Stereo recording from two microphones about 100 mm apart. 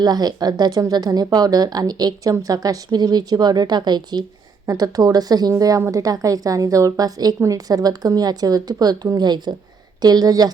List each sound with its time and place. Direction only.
0.0 s a woman's voice: 40° right (ahead or behind)
4.6 s a woman's voice: 35° right (ahead or behind)